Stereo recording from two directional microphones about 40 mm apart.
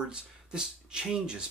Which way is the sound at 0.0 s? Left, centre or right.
Right.